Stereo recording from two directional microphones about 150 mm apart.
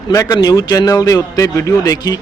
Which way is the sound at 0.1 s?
25° left (ahead or behind).